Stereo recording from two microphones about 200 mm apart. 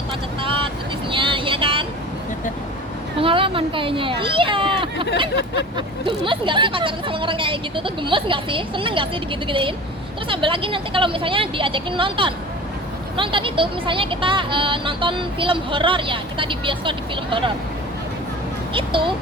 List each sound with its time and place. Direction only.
0.4 s vehicle: 25° right (ahead or behind)
3.2 s speech: 25° right (ahead or behind)
18.7 s speech: 25° right (ahead or behind)